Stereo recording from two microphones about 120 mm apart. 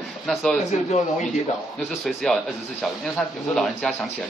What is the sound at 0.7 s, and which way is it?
Speech, 80° left.